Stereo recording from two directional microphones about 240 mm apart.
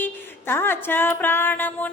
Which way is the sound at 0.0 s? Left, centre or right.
Centre.